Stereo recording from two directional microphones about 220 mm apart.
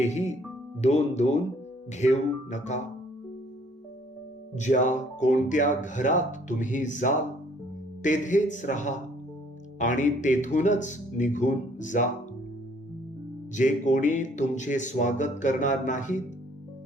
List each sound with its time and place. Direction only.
0.0 s speech: 30° left (ahead or behind)
4.5 s speech: 35° left (ahead or behind)
13.5 s speech: 35° left (ahead or behind)